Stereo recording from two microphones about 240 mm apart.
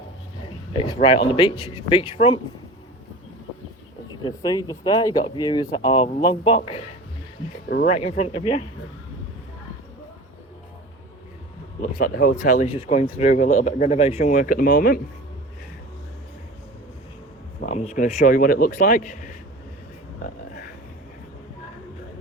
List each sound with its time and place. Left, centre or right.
0.7 s speech: left
4.2 s speech: centre
7.7 s speech: left
7.9 s speech: left
11.8 s speech: left
17.7 s speech: left